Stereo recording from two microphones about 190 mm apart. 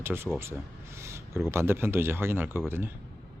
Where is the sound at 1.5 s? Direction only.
15° right (ahead or behind).